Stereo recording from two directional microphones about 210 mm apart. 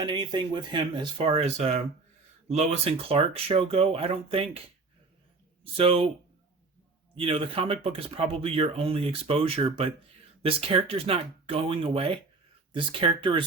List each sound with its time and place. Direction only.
0.0 s speech: 20° right (ahead or behind)
5.7 s speech: 25° right (ahead or behind)
7.2 s speech: 25° right (ahead or behind)